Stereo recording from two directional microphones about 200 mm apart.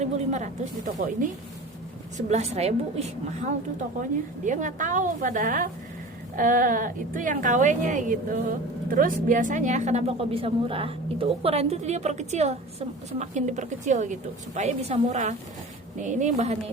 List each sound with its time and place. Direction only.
0.0 s a woman's voice: 35° right (ahead or behind)